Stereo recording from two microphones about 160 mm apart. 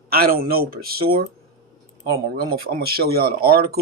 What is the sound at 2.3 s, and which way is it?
A man's voice, 75° right (ahead or behind).